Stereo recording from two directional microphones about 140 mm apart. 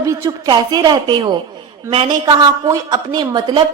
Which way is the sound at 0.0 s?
25° right (ahead or behind).